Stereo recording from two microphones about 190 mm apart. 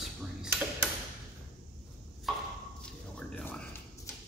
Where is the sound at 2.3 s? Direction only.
Centre (ahead or behind).